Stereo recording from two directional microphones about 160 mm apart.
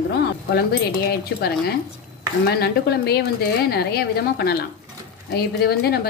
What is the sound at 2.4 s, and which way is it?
A woman's voice, 85° left.